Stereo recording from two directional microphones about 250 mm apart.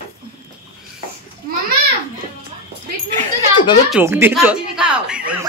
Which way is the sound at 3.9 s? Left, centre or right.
Centre.